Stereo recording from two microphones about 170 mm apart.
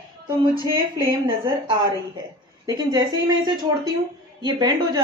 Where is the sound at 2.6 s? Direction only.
25° right (ahead or behind).